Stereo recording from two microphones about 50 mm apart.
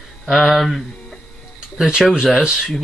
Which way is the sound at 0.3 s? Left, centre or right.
Centre.